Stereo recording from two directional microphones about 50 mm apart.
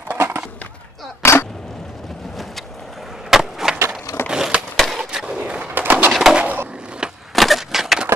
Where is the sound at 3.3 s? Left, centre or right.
Centre.